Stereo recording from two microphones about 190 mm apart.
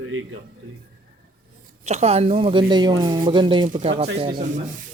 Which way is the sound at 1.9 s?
35° right (ahead or behind).